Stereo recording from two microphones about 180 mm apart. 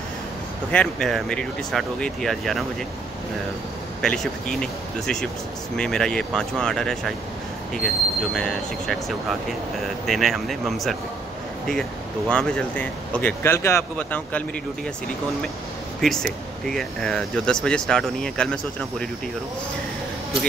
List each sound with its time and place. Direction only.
0.7 s speech: 5° left (ahead or behind)
4.0 s speech: 5° left (ahead or behind)
10.0 s speech: centre (ahead or behind)
12.3 s speech: 5° left (ahead or behind)
16.0 s speech: centre (ahead or behind)